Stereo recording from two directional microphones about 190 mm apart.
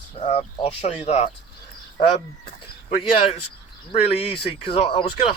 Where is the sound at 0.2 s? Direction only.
35° left (ahead or behind).